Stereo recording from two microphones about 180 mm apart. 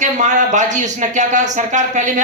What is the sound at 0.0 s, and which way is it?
A woman's voice, 40° right (ahead or behind).